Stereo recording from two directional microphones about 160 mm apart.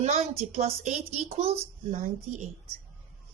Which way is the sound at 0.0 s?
40° right (ahead or behind).